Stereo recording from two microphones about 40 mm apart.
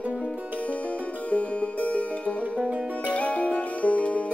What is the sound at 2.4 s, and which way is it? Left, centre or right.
Music, right.